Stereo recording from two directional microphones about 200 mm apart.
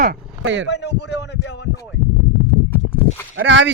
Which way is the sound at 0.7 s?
60° left (ahead or behind).